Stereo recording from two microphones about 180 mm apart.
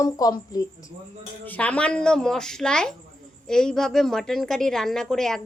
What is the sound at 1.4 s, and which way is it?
A woman's voice, 10° left (ahead or behind).